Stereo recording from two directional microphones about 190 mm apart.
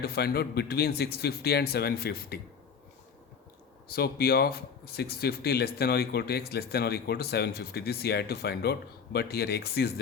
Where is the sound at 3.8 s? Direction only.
55° left (ahead or behind).